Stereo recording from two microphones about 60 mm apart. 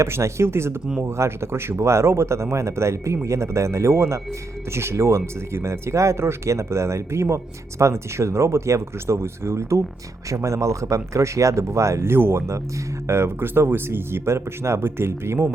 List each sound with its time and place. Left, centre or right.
0.0 s speech: right